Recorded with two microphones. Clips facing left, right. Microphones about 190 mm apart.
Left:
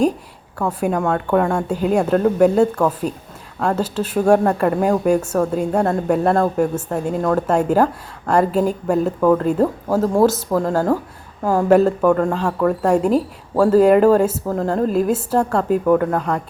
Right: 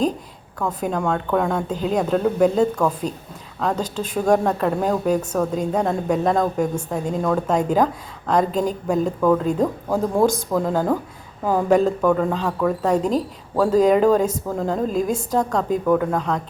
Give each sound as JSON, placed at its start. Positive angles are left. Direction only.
{"t": 0.6, "sound": "speech", "side_deg": 10}